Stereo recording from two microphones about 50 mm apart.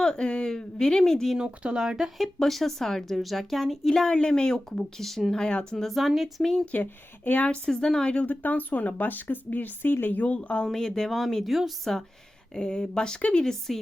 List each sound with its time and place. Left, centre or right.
0.0 s speech: centre
1.5 s speech: right
1.8 s speech: centre
2.1 s a woman's voice: centre
5.4 s speech: centre
5.7 s a woman's voice: centre
6.7 s speech: left
7.7 s speech: centre
8.0 s speech: left
8.3 s speech: left
10.7 s speech: centre